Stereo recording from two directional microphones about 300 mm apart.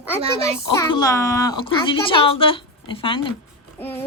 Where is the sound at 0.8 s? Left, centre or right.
Centre.